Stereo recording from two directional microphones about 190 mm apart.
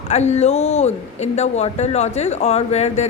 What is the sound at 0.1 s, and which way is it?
Speech, 35° left (ahead or behind).